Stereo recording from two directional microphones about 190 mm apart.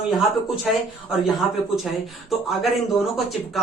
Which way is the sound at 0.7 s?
Centre (ahead or behind).